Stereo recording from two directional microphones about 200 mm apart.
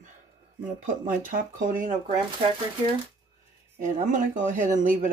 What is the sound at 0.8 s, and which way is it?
Speech, 40° right (ahead or behind).